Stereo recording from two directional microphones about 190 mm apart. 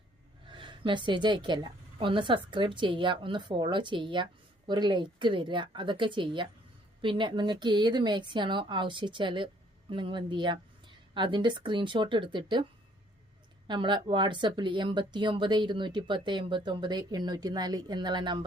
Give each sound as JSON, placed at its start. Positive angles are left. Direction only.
{"t": 0.4, "sound": "a woman's voice", "side_deg": -25}
{"t": 13.7, "sound": "a woman's voice", "side_deg": -25}